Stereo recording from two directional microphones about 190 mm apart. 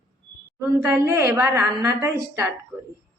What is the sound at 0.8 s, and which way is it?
Speech, 15° right (ahead or behind).